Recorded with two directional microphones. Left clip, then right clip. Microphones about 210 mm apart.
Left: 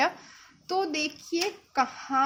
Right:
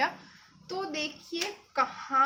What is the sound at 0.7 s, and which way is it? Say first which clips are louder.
Speech: left 6 dB; 50° left (ahead or behind).